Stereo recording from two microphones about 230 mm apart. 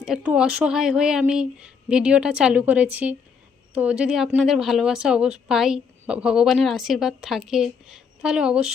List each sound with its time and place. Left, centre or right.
0.0 s a woman's voice: centre